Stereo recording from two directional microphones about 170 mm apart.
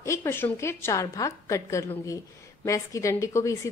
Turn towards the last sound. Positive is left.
turn(degrees=15)  # may be behind; listen again after turning